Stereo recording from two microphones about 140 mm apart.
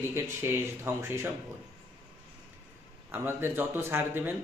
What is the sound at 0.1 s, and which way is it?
Speech, 15° right (ahead or behind).